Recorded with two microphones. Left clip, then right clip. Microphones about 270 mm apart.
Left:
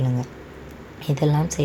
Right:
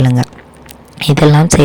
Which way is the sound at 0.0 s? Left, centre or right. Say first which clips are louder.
Right 13 dB; right.